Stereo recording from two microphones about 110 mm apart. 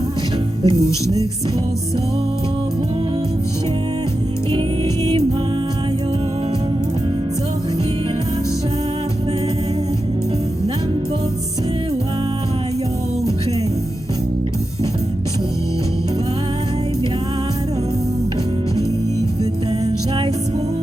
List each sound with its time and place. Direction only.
0.6 s music: 30° left (ahead or behind)